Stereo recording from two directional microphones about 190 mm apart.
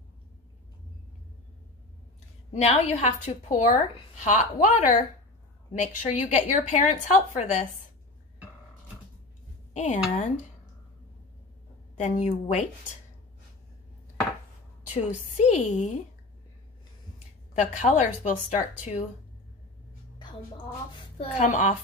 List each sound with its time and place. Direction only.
2.5 s a woman's voice: 35° left (ahead or behind)
10.1 s a woman's voice: 40° left (ahead or behind)
11.9 s a woman's voice: 40° left (ahead or behind)
15.0 s a woman's voice: 40° left (ahead or behind)
17.6 s a woman's voice: 40° left (ahead or behind)
21.3 s a woman's voice: 35° left (ahead or behind)